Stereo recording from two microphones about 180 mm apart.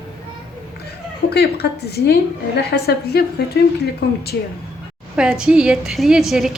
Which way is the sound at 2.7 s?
60° left (ahead or behind).